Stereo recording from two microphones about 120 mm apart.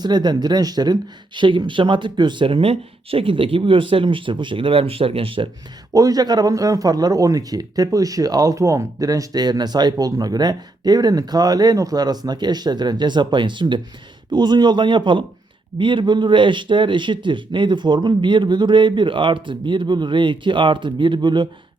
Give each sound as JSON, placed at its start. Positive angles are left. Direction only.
{"t": 0.0, "sound": "a man's voice", "side_deg": -35}
{"t": 5.9, "sound": "a man's voice", "side_deg": -30}